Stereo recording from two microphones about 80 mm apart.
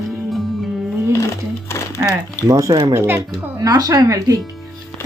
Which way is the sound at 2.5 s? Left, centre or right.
Right.